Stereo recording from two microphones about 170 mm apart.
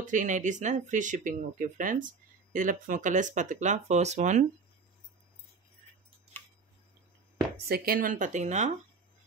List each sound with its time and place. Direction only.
0.0 s speech: 50° right (ahead or behind)
7.6 s speech: 65° right (ahead or behind); by 8.7 s 45° right (ahead or behind)